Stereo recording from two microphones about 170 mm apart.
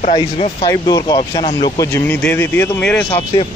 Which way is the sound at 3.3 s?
35° left (ahead or behind).